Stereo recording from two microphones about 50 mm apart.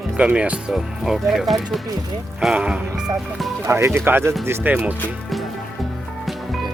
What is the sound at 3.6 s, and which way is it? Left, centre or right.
Speech, right.